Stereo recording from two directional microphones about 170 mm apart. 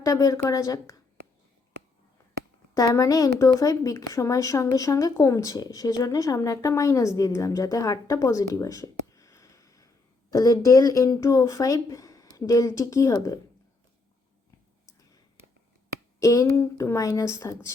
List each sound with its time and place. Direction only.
0.0 s speech: 20° left (ahead or behind)
2.7 s speech: 20° left (ahead or behind)
14.8 s a sound: 20° left (ahead or behind)
16.2 s speech: 20° left (ahead or behind)